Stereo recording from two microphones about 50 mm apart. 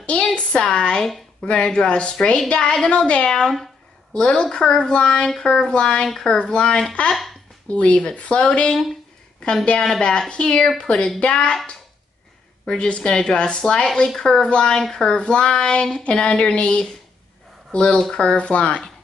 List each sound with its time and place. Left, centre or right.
0.0 s a sound: left
1.4 s a woman's voice: centre
9.8 s a woman's voice: centre
12.6 s a woman's voice: left